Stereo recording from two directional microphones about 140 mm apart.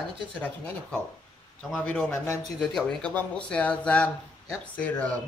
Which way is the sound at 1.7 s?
5° left (ahead or behind).